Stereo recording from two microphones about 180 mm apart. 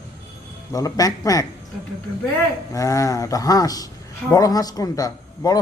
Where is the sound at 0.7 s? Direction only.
20° left (ahead or behind).